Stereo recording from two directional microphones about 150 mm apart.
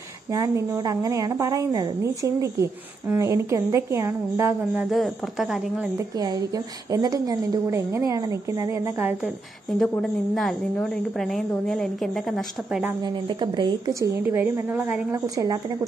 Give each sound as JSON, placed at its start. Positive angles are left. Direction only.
{"t": 0.3, "sound": "a woman's voice", "side_deg": -20}
{"t": 4.8, "sound": "a woman's voice", "side_deg": 0}
{"t": 5.9, "sound": "a woman's voice", "side_deg": -25}
{"t": 10.3, "sound": "a woman's voice", "side_deg": 0}
{"t": 13.0, "sound": "a woman's voice", "side_deg": -30}